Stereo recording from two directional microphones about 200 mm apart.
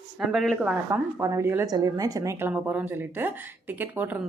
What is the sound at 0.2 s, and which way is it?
Speech, centre (ahead or behind).